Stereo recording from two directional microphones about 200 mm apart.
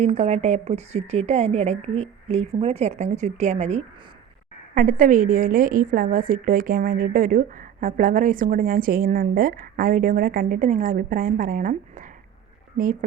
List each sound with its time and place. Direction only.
0.0 s a woman's voice: 30° right (ahead or behind)